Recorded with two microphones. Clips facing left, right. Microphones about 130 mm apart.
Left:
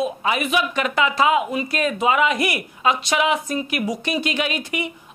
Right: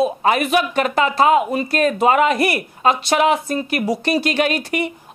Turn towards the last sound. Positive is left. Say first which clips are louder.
# right 5 dB
turn(degrees=-45)  # may be behind; listen again after turning